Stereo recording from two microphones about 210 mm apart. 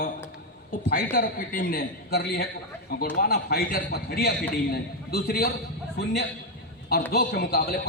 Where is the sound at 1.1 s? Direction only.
40° left (ahead or behind).